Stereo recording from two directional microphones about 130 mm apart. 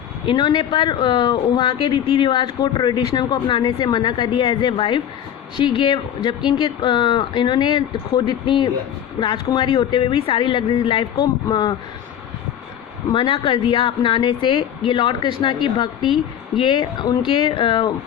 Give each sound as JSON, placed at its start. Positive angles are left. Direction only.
{"t": 0.3, "sound": "speech", "side_deg": 35}
{"t": 13.1, "sound": "speech", "side_deg": 45}
{"t": 16.0, "sound": "a woman's voice", "side_deg": -5}
{"t": 16.6, "sound": "speech", "side_deg": 35}